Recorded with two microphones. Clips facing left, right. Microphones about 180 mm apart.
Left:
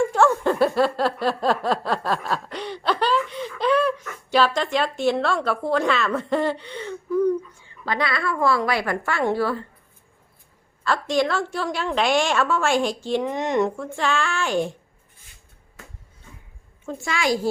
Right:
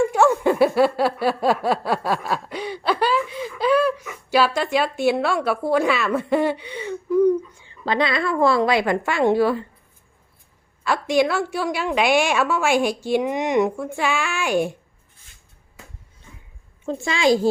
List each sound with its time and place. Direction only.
0.1 s a woman's voice: 10° right (ahead or behind)
10.8 s a woman's voice: 10° right (ahead or behind)
16.8 s a woman's voice: 25° right (ahead or behind)